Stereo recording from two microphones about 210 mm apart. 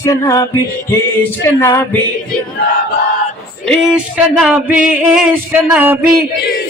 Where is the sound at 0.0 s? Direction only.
15° left (ahead or behind).